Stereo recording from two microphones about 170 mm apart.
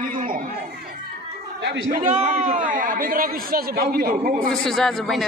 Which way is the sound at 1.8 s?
45° right (ahead or behind).